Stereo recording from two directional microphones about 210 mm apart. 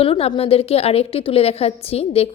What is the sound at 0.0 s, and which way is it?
A woman's voice, 25° left (ahead or behind).